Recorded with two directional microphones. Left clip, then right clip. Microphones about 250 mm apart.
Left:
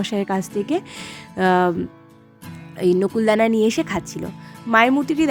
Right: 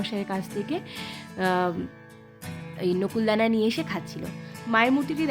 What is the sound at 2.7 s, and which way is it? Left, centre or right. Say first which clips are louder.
Speech: left 8 dB; left.